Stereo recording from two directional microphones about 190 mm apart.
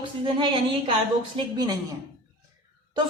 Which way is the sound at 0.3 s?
30° right (ahead or behind).